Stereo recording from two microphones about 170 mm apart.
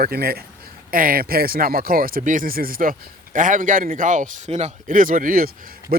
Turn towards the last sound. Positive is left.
turn(degrees=-55)  # may be behind; listen again after turning